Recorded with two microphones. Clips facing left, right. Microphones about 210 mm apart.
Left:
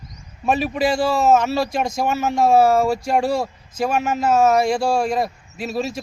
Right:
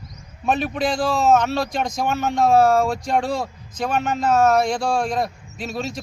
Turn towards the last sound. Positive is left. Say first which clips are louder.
# left 3 dB
turn(degrees=5)  # may be behind; listen again after turning